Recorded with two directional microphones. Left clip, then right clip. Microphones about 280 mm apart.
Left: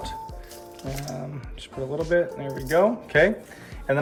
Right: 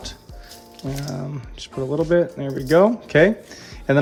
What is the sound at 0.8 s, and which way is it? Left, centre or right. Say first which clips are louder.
Speech: right 4 dB; centre.